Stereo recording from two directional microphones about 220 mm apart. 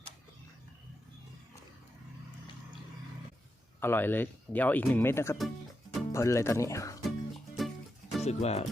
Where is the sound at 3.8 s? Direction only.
10° left (ahead or behind).